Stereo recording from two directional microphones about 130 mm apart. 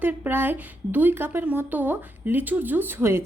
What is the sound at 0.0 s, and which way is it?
A woman's voice, 15° right (ahead or behind).